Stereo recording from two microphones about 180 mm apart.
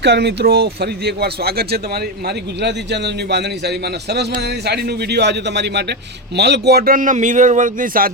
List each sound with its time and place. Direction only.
0.0 s speech: 65° right (ahead or behind); by 8.1 s 50° right (ahead or behind)